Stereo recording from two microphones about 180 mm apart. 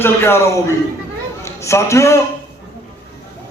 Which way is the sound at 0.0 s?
15° left (ahead or behind).